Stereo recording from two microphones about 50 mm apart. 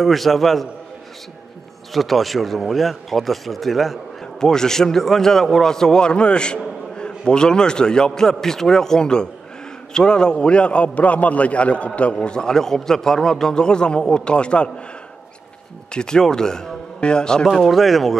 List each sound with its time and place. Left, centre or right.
0.0 s speech: centre
2.0 s speech: centre
4.4 s a man's voice: centre
15.9 s speech: centre
17.6 s speech: centre